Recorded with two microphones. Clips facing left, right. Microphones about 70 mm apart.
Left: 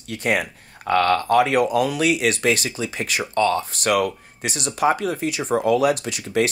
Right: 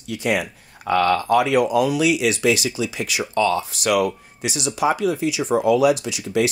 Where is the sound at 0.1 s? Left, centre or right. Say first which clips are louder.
Even; left.